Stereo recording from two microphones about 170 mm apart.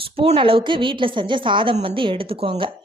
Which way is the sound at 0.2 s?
30° right (ahead or behind).